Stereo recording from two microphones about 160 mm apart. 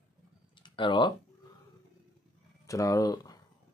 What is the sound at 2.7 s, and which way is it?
Speech, 20° left (ahead or behind).